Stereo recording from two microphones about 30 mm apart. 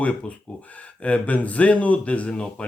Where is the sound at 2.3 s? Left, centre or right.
Left.